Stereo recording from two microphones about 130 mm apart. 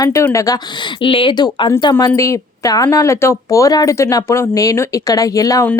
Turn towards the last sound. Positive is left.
turn(degrees=25)  # may be behind; listen again after turning